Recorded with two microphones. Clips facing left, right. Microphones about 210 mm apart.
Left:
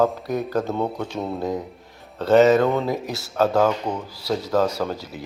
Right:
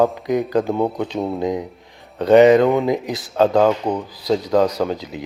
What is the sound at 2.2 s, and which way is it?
Speech, 15° right (ahead or behind).